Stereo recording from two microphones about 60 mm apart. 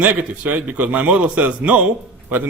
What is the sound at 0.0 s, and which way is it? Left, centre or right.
A man's voice, right.